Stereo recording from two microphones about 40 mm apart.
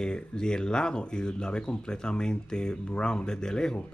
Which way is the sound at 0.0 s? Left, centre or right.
Centre.